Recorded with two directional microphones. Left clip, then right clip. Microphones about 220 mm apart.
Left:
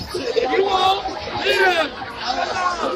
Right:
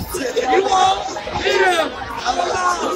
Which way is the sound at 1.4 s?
20° right (ahead or behind).